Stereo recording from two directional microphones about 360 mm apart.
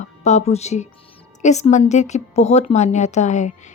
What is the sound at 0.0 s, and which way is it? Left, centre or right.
A woman's voice, centre.